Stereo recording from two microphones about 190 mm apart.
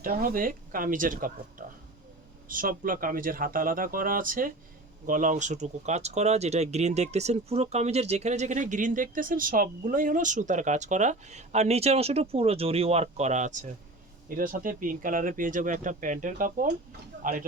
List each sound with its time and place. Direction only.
0.0 s speech: 50° right (ahead or behind)